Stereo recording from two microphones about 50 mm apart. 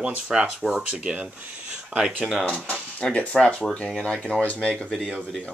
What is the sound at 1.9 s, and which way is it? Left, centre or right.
Speech, centre.